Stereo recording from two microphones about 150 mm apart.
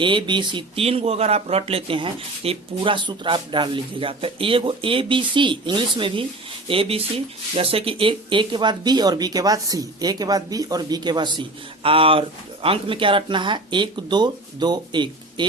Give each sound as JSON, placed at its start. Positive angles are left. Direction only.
{"t": 0.0, "sound": "speech", "side_deg": -35}